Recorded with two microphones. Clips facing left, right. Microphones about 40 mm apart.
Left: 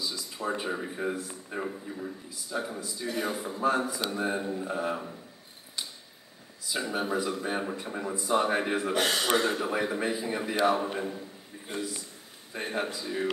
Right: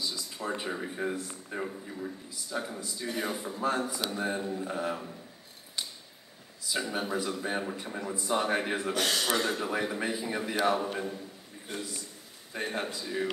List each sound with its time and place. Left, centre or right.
0.0 s speech: centre
3.3 s a man's voice: centre
6.7 s speech: centre
8.9 s a man's voice: centre
11.7 s a man's voice: left
12.5 s a man's voice: centre